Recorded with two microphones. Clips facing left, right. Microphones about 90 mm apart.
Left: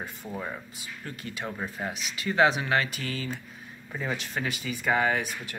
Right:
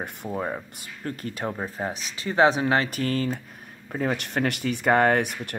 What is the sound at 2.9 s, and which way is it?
Speech, 45° right (ahead or behind).